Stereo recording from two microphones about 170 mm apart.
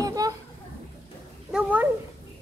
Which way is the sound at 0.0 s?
20° right (ahead or behind).